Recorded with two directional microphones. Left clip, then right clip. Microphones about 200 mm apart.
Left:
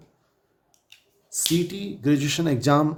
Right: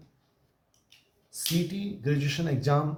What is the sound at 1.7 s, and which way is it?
Speech, 55° left (ahead or behind).